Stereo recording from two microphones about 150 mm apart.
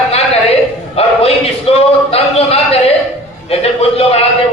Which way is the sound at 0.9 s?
40° left (ahead or behind).